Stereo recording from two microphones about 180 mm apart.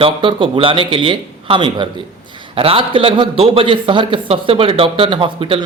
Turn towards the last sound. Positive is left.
turn(degrees=-30)  # may be behind; listen again after turning